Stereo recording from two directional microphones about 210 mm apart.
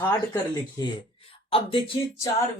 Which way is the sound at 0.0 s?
15° left (ahead or behind).